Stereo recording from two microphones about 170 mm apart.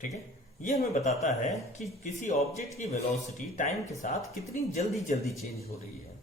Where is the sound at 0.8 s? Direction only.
45° left (ahead or behind).